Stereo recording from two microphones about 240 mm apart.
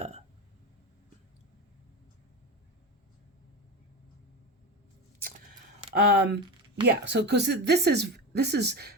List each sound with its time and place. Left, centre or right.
5.9 s speech: right